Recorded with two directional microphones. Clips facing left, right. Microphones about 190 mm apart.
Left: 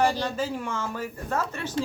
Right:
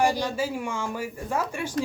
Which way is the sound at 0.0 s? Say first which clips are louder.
Right 1 dB; 10° right (ahead or behind).